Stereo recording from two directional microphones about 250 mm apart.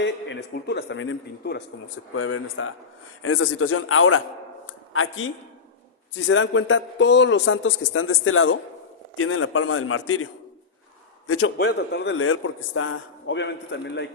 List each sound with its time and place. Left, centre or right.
0.0 s a man's voice: left
4.6 s a sound: left
6.1 s a man's voice: left
11.3 s a man's voice: left